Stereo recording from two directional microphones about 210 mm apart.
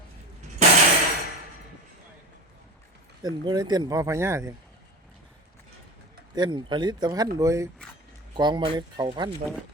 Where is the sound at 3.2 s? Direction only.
20° right (ahead or behind).